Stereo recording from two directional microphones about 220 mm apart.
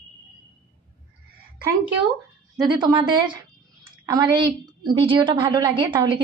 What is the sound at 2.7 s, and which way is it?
A woman's voice, 20° right (ahead or behind).